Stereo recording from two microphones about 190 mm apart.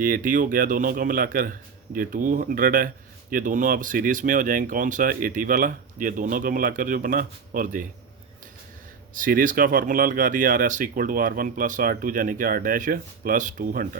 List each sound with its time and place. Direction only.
0.0 s speech: 45° right (ahead or behind)
9.1 s speech: 45° right (ahead or behind)